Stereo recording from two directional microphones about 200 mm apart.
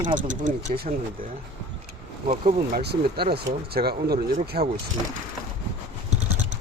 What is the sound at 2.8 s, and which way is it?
Speech, 55° right (ahead or behind).